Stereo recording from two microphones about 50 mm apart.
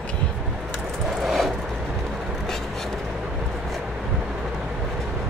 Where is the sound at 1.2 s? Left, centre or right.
Centre.